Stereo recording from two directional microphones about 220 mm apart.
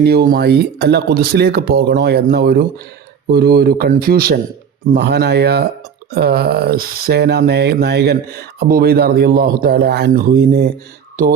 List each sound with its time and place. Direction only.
0.0 s speech: 45° right (ahead or behind)